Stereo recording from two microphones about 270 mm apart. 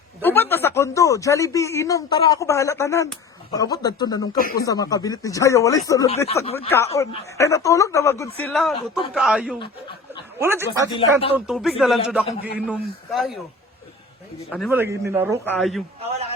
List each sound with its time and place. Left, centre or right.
0.2 s speech: centre
4.4 s speech: left
4.6 s speech: centre
6.2 s speech: left
6.7 s speech: centre
10.9 s speech: left
11.3 s speech: centre
14.7 s speech: centre
15.4 s speech: centre
16.0 s a sound: right